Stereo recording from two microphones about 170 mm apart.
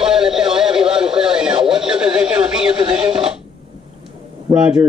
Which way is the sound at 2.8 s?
30° right (ahead or behind).